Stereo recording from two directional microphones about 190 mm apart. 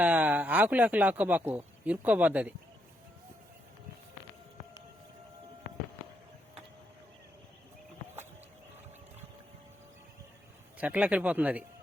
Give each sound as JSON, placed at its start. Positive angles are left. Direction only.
{"t": 0.0, "sound": "a man's voice", "side_deg": -10}
{"t": 10.8, "sound": "a man's voice", "side_deg": -10}